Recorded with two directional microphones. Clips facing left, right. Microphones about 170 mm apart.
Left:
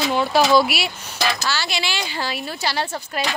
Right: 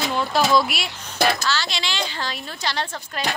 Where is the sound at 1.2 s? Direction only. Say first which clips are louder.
Right 3 dB; 55° right (ahead or behind).